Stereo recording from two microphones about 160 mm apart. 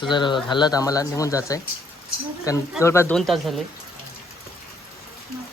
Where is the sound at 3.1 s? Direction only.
Centre (ahead or behind).